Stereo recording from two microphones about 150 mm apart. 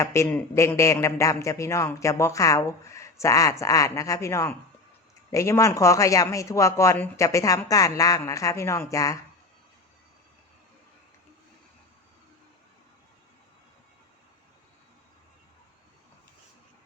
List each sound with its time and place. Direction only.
0.0 s a man's voice: 20° left (ahead or behind)